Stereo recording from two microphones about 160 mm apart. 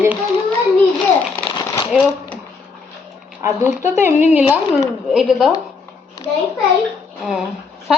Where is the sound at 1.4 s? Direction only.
30° left (ahead or behind).